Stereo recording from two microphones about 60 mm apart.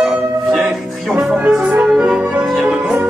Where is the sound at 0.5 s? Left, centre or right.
Centre.